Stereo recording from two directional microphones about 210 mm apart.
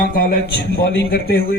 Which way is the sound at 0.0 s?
45° left (ahead or behind).